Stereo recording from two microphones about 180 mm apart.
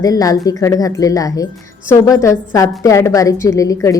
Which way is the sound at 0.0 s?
20° left (ahead or behind).